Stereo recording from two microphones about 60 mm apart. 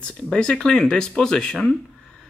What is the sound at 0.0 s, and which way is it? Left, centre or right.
Speech, centre.